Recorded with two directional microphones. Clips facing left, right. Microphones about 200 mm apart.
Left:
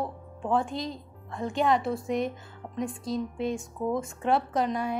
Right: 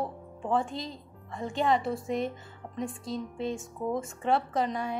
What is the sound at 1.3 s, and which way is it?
Speech, centre (ahead or behind).